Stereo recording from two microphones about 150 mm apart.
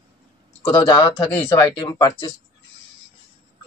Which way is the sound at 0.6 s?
30° left (ahead or behind).